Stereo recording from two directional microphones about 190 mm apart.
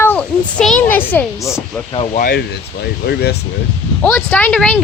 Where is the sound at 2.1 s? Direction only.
50° left (ahead or behind).